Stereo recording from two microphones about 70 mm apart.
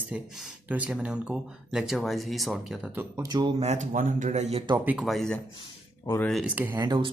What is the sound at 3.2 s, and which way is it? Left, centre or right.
Speech, right.